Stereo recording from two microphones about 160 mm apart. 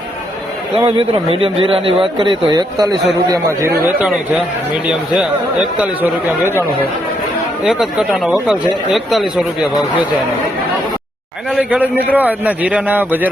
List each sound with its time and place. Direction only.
0.8 s a man's voice: 35° right (ahead or behind); by 3.9 s 20° right (ahead or behind)
4.9 s a man's voice: 5° right (ahead or behind)
7.6 s speech: 5° right (ahead or behind)
11.5 s a man's voice: 10° right (ahead or behind)